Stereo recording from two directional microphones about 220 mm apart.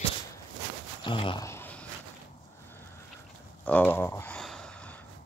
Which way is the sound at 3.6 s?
5° left (ahead or behind).